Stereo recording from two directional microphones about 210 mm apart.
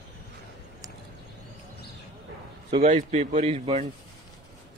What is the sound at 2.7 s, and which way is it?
A man's voice, 30° right (ahead or behind).